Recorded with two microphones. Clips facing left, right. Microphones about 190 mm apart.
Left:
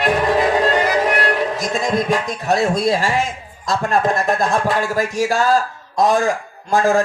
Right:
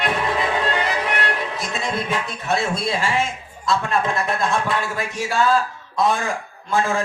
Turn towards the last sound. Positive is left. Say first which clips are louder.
# left 6 dB
turn(degrees=40)  # may be behind; listen again after turning